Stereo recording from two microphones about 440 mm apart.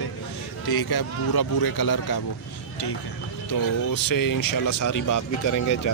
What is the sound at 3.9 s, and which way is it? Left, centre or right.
A man's voice, left.